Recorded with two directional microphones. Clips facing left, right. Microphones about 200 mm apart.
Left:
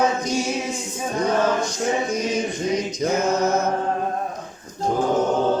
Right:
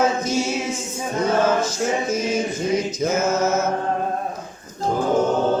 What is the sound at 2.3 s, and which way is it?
Mantra, 5° right (ahead or behind).